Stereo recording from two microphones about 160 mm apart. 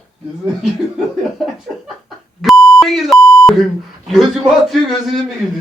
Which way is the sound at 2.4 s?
Centre (ahead or behind).